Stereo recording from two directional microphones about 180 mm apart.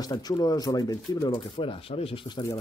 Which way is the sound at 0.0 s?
20° left (ahead or behind).